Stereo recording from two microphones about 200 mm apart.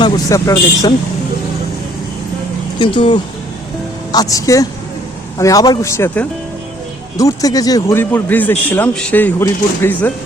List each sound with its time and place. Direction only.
0.0 s a man's voice: 15° left (ahead or behind)
2.7 s a man's voice: 25° left (ahead or behind)